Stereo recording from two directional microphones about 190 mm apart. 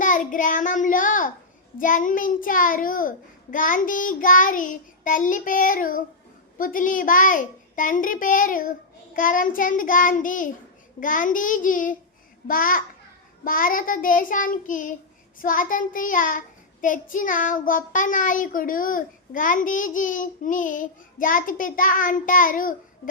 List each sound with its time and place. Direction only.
0.0 s a child's voice: 45° left (ahead or behind)